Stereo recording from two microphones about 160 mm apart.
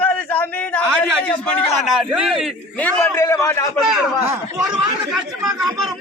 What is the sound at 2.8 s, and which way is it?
Speech, 10° left (ahead or behind).